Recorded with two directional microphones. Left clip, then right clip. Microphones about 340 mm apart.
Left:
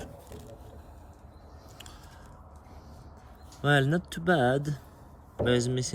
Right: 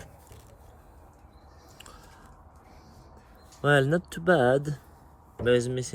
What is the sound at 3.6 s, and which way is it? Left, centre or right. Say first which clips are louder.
Speech: right 3 dB; centre.